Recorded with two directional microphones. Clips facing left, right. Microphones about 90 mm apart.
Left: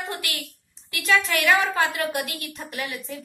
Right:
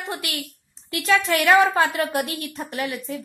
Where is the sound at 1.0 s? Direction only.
35° right (ahead or behind).